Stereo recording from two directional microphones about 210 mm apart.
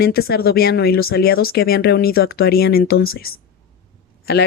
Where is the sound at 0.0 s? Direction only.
45° left (ahead or behind).